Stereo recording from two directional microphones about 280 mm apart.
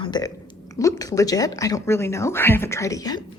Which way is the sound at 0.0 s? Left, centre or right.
Centre.